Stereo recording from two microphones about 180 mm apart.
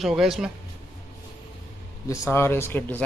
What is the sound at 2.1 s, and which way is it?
Speech, 15° left (ahead or behind).